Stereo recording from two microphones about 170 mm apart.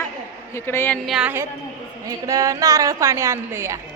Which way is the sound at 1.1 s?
5° right (ahead or behind).